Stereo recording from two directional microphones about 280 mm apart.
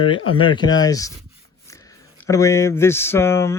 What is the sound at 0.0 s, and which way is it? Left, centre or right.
Speech, centre.